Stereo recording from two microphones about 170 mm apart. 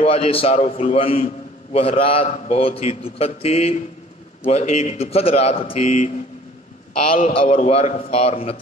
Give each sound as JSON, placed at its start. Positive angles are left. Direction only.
{"t": 0.0, "sound": "a man's voice", "side_deg": 35}
{"t": 7.3, "sound": "a man's voice", "side_deg": 35}